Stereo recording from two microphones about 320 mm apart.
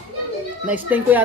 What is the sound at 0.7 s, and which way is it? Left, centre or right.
Speech, centre.